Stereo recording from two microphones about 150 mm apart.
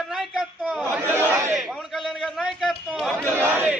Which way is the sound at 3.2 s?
15° right (ahead or behind).